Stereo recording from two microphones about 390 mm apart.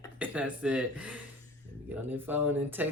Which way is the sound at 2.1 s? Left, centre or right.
Centre.